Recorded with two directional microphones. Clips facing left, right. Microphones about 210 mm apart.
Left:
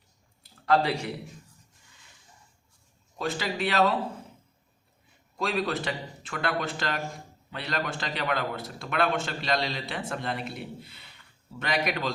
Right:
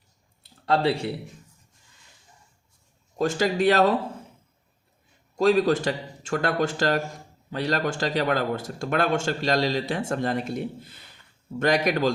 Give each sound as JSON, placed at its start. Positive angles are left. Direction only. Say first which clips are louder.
{"t": 0.6, "sound": "speech", "louder": "right 2 dB", "side_deg": -30}
{"t": 3.2, "sound": "speech", "louder": "right 7 dB", "side_deg": -45}
{"t": 5.4, "sound": "speech", "louder": "right 9 dB", "side_deg": -45}